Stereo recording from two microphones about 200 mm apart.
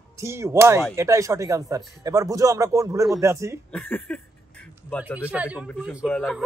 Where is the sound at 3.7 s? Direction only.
5° left (ahead or behind).